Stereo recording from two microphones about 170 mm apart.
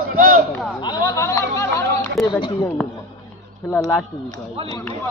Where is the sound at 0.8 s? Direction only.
20° left (ahead or behind).